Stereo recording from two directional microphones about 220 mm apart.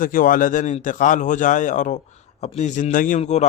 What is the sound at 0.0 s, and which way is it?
A man's voice, 40° left (ahead or behind).